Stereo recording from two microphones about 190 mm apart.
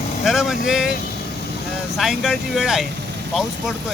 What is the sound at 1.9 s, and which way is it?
Speech, centre (ahead or behind).